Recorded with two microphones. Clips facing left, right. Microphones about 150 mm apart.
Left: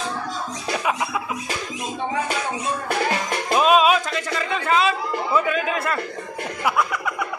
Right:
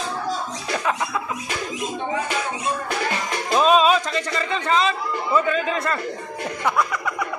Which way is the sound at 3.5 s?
5° left (ahead or behind).